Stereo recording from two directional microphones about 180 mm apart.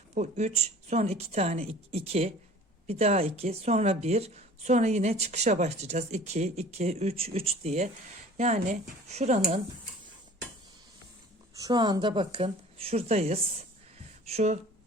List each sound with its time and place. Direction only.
0.1 s speech: 40° right (ahead or behind)
11.6 s speech: 25° right (ahead or behind)